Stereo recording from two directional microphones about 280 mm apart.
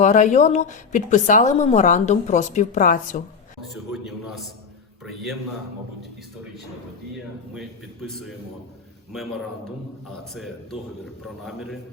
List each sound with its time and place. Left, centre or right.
0.0 s a woman's voice: left
3.9 s a man's voice: centre
7.5 s a man's voice: centre
10.3 s a man's voice: centre